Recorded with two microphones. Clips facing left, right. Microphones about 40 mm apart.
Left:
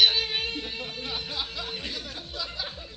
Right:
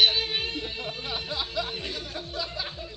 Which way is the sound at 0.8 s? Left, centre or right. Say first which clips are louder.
Right 1 dB; centre.